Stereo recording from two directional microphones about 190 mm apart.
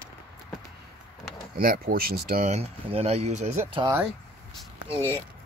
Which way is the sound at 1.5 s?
50° right (ahead or behind).